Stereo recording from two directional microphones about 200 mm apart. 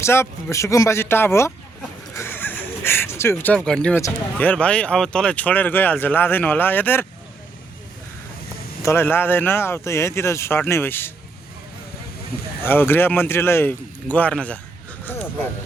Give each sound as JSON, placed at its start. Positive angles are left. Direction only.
{"t": 0.0, "sound": "speech", "side_deg": 10}
{"t": 8.8, "sound": "speech", "side_deg": 15}
{"t": 12.6, "sound": "speech", "side_deg": 10}
{"t": 15.0, "sound": "a sound", "side_deg": 10}